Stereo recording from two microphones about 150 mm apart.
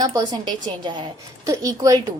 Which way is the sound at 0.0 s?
25° right (ahead or behind).